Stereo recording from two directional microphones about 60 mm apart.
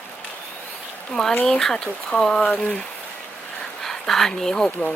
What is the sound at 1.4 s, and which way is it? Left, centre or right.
Speech, centre.